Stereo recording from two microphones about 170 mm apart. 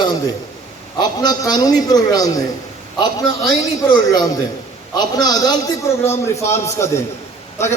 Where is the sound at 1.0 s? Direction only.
25° left (ahead or behind).